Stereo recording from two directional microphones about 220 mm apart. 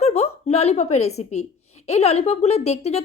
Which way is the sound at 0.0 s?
30° left (ahead or behind).